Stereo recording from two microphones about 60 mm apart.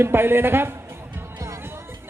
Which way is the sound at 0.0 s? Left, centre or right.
Right.